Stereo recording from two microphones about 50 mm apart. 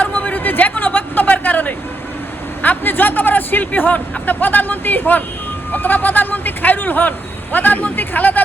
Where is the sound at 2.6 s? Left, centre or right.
Left.